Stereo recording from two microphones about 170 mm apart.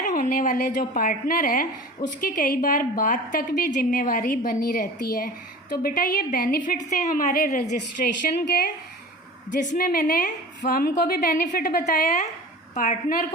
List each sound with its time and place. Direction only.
0.0 s a woman's voice: 50° left (ahead or behind)
9.5 s a woman's voice: 50° left (ahead or behind)
12.0 s a woman's voice: 45° left (ahead or behind)